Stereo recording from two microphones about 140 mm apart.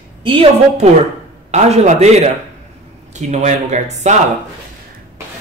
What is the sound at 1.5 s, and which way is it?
Speech, 55° right (ahead or behind).